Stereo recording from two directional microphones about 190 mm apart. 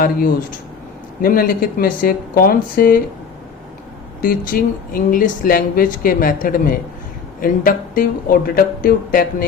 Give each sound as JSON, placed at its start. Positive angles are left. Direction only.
{"t": 0.0, "sound": "speech", "side_deg": 50}
{"t": 4.2, "sound": "speech", "side_deg": 50}